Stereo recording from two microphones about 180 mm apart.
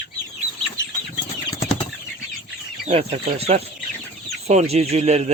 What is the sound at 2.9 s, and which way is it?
Speech, 35° right (ahead or behind).